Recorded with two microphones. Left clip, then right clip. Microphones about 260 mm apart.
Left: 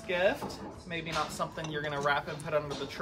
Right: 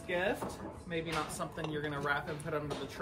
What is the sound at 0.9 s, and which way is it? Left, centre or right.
Speech, centre.